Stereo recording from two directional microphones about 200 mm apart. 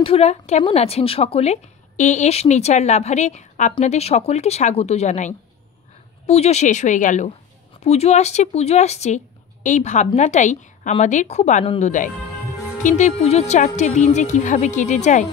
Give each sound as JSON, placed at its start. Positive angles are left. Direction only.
{"t": 0.0, "sound": "speech", "side_deg": 30}